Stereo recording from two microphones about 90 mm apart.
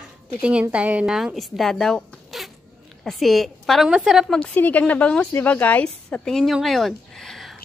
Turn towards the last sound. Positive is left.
turn(degrees=0)  # may be behind; listen again after turning